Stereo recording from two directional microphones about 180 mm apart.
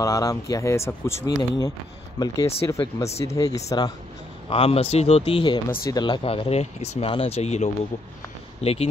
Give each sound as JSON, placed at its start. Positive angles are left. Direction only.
{"t": 0.0, "sound": "speech", "side_deg": 20}
{"t": 4.5, "sound": "speech", "side_deg": 30}